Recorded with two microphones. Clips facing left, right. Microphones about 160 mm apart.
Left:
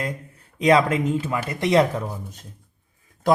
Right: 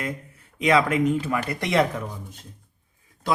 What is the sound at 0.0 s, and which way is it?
Speech, 35° left (ahead or behind).